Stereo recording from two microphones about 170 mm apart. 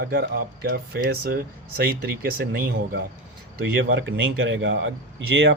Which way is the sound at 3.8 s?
90° right.